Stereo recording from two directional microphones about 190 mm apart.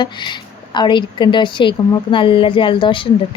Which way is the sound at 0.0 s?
25° left (ahead or behind).